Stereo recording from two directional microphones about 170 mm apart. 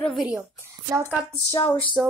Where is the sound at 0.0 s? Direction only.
Centre (ahead or behind).